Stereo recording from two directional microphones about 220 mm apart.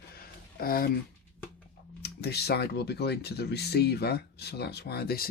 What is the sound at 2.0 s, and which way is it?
Speech, 45° left (ahead or behind).